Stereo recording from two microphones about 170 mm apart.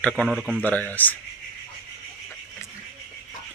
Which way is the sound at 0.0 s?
5° left (ahead or behind).